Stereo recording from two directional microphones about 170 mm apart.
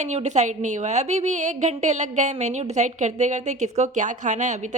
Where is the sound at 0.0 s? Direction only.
40° right (ahead or behind).